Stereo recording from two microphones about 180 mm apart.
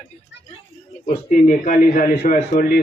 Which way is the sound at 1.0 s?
45° left (ahead or behind).